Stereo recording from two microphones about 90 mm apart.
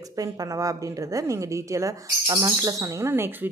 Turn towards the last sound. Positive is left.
turn(degrees=-25)  # may be behind; listen again after turning